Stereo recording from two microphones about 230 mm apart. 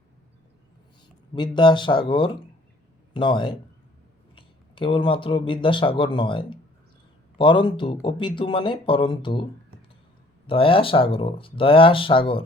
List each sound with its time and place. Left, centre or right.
1.4 s speech: centre